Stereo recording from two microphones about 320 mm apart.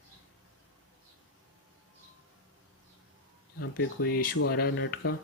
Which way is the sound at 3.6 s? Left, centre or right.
Left.